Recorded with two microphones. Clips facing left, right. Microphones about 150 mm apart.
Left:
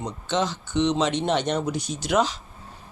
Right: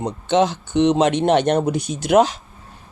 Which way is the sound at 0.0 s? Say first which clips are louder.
Right 8 dB; 55° right (ahead or behind).